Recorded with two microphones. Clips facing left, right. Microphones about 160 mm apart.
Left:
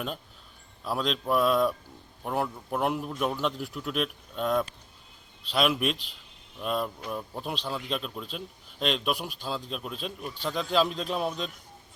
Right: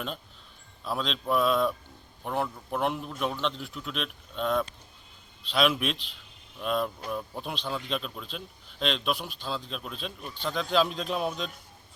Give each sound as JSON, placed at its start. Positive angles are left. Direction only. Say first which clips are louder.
{"t": 0.9, "sound": "speech", "louder": "left 2 dB", "side_deg": 5}